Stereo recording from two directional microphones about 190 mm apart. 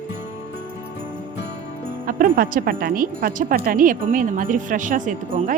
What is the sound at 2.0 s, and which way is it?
Speech, 45° right (ahead or behind).